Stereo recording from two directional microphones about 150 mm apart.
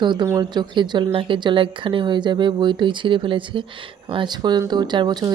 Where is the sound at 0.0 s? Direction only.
30° right (ahead or behind).